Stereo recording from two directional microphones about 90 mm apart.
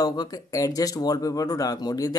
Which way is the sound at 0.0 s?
45° left (ahead or behind).